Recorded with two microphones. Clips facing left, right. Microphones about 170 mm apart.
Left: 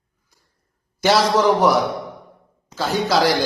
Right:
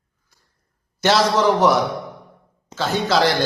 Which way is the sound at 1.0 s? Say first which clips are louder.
Left 1 dB; 10° left (ahead or behind).